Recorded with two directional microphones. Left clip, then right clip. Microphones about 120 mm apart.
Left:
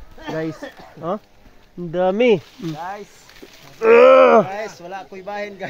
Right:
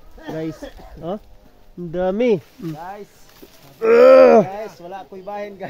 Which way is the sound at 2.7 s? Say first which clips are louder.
Left 5 dB; 25° left (ahead or behind).